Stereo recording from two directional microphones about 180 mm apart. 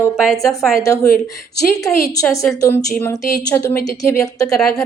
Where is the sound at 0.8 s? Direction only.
20° left (ahead or behind).